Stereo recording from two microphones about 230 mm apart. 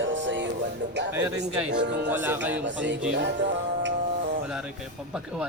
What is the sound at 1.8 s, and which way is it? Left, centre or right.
Speech, right.